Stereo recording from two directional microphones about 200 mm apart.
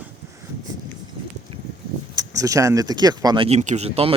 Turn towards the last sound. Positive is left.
turn(degrees=-30)  # may be behind; listen again after turning